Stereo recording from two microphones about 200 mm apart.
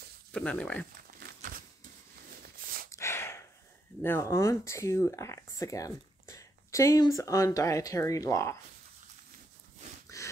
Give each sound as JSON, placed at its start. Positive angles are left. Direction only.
{"t": 0.3, "sound": "speech", "side_deg": 5}
{"t": 2.9, "sound": "gasp", "side_deg": 15}
{"t": 4.0, "sound": "speech", "side_deg": 10}
{"t": 10.0, "sound": "a sound", "side_deg": 15}